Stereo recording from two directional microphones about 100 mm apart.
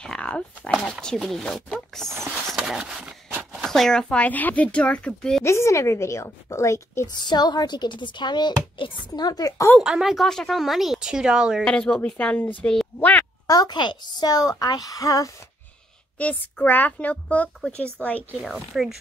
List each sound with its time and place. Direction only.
0.0 s speech: 10° left (ahead or behind)
2.5 s a sound: 5° right (ahead or behind)
3.6 s speech: 5° left (ahead or behind)
5.4 s a woman's voice: 25° left (ahead or behind)
7.2 s speech: 45° left (ahead or behind)
9.8 s speech: 5° right (ahead or behind)
11.6 s speech: 10° left (ahead or behind)
13.5 s a child's voice: 45° left (ahead or behind)
16.2 s speech: 15° left (ahead or behind)
18.4 s speech: centre (ahead or behind)